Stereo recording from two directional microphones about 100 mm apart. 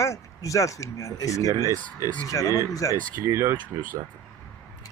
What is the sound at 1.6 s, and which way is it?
Speech, 30° right (ahead or behind).